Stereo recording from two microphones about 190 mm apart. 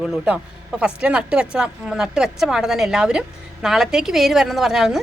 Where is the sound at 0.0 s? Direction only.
Centre (ahead or behind).